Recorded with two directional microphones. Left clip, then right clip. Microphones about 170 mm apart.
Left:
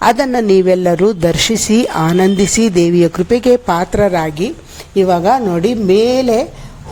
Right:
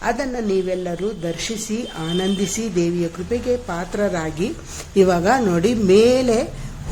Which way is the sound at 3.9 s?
30° left (ahead or behind).